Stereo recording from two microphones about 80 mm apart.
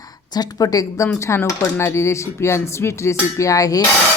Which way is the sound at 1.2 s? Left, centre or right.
Left.